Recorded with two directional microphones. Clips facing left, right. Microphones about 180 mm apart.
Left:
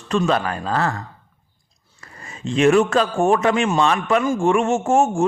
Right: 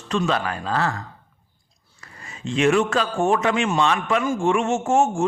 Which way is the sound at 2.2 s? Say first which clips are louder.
Left 3 dB; 40° left (ahead or behind).